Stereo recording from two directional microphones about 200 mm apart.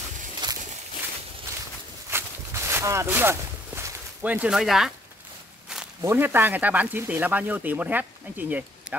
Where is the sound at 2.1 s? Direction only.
10° right (ahead or behind).